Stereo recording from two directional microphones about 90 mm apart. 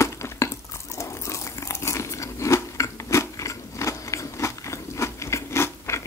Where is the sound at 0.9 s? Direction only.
35° left (ahead or behind).